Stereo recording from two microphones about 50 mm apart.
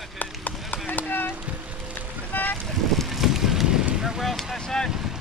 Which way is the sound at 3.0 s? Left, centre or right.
Centre.